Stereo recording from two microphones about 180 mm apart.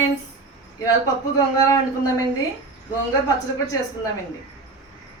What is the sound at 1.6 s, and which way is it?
Speech, 15° left (ahead or behind).